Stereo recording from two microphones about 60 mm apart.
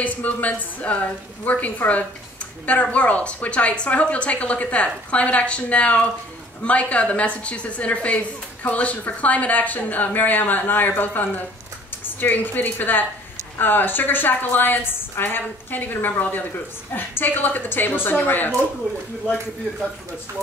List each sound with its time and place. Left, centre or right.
0.0 s a woman's voice: left